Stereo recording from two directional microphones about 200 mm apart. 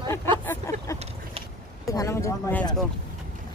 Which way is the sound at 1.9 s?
15° left (ahead or behind).